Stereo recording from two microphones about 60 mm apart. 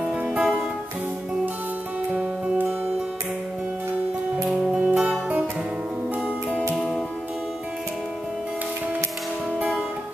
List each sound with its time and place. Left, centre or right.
0.2 s music: centre
2.1 s music: centre
4.7 s music: centre